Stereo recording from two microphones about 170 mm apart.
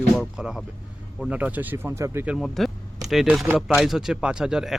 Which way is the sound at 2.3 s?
Centre (ahead or behind).